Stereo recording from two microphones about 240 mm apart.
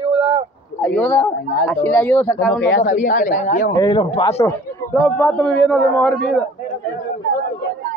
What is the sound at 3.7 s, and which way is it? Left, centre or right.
A man's voice, centre.